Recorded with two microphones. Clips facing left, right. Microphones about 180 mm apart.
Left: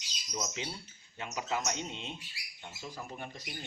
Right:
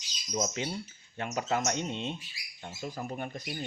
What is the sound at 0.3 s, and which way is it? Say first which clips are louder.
Speech: right 7 dB; 50° right (ahead or behind).